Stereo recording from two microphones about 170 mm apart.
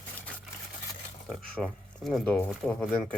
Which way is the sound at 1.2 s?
Centre (ahead or behind).